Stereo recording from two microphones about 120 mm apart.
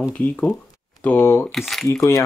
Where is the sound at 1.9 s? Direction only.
25° left (ahead or behind).